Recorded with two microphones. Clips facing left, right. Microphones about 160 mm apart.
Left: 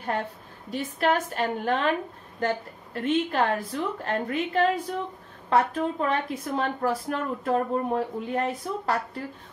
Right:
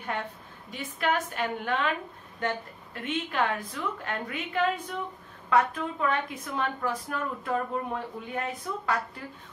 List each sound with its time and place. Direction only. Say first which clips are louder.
0.0 s a woman's voice: left 4 dB; 40° left (ahead or behind)